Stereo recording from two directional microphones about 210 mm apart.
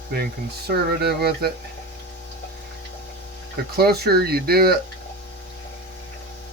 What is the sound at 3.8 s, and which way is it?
Speech, 50° right (ahead or behind).